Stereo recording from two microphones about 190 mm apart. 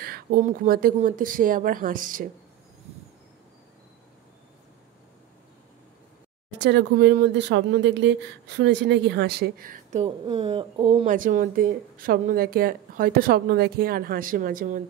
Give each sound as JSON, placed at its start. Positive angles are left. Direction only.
{"t": 0.0, "sound": "speech", "side_deg": -50}
{"t": 6.6, "sound": "speech", "side_deg": -65}
{"t": 10.2, "sound": "speech", "side_deg": -25}